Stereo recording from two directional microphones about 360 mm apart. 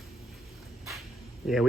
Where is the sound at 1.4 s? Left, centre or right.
Centre.